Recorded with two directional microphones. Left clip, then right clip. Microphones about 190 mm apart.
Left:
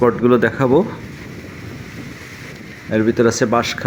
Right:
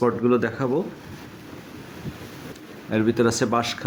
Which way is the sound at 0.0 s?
25° left (ahead or behind).